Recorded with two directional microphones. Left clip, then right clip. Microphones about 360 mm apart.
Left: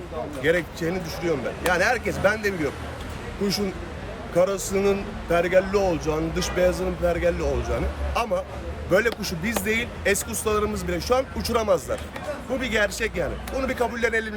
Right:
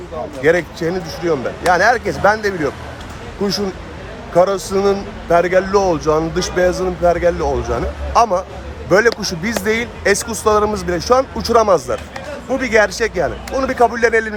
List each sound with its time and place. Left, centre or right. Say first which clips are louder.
0.4 s a man's voice: right 8 dB; centre
4.4 s a man's voice: right 8 dB; centre